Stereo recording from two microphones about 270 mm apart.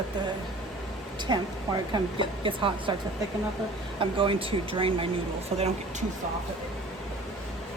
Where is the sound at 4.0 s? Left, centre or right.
Centre.